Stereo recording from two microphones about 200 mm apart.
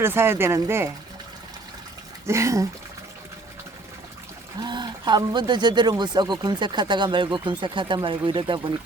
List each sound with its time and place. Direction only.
0.0 s speech: 10° right (ahead or behind)
2.2 s speech: 15° right (ahead or behind)
4.6 s speech: 20° right (ahead or behind)